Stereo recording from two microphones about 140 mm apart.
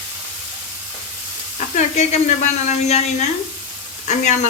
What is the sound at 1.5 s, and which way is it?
Speech, 60° left (ahead or behind).